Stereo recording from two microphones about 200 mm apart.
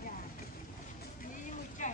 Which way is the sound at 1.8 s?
40° left (ahead or behind).